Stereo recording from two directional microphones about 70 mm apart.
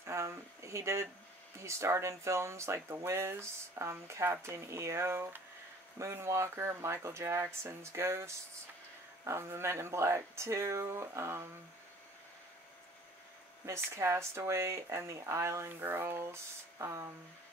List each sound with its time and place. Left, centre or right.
0.0 s a sound: right
1.6 s speech: right
13.7 s speech: right